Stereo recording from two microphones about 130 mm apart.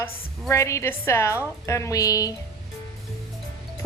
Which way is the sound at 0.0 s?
20° left (ahead or behind).